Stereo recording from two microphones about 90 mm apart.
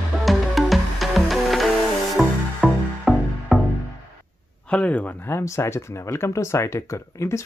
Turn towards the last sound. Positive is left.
turn(degrees=35)  # may be behind; listen again after turning